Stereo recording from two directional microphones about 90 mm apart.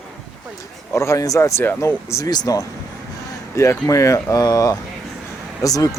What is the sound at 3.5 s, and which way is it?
A man's voice, 35° left (ahead or behind).